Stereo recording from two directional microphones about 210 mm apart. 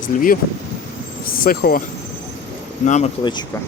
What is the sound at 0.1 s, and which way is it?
Speech, 40° left (ahead or behind).